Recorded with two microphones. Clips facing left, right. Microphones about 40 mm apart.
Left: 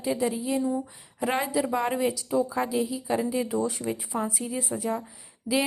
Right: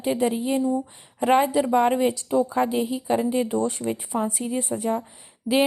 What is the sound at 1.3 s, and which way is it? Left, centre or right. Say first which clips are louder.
A woman's voice: right 7 dB; right.